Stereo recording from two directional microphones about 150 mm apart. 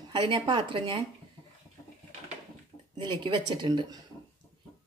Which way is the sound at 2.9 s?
35° right (ahead or behind).